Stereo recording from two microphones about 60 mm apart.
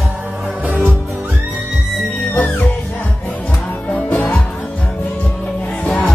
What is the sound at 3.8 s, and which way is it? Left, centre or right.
Music, left.